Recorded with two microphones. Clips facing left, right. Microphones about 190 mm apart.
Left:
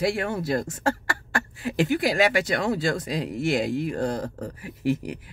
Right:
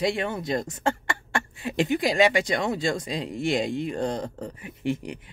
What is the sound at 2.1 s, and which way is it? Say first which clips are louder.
Speech: right 1 dB; 25° right (ahead or behind).